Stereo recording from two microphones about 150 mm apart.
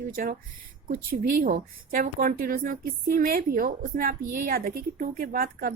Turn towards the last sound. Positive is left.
turn(degrees=-70)  # may be behind; listen again after turning